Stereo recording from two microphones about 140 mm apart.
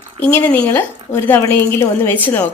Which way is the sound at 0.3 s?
10° left (ahead or behind).